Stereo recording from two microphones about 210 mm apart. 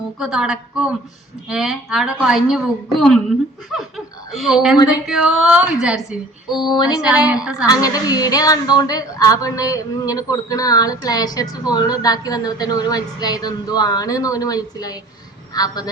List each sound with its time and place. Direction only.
0.2 s a woman's voice: 5° right (ahead or behind)
6.5 s female singing: 20° left (ahead or behind)
7.6 s a woman's voice: 15° left (ahead or behind)